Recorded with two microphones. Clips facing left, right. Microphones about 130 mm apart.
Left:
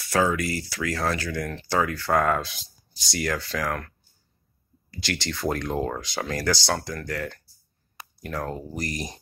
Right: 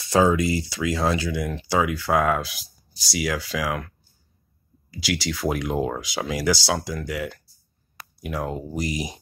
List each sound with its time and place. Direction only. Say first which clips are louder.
0.0 s speech: right 4 dB; 20° right (ahead or behind)
4.9 s speech: right 4 dB; 5° right (ahead or behind)